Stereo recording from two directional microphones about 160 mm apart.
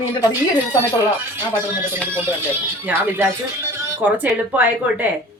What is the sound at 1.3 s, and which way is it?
Speech, 15° right (ahead or behind).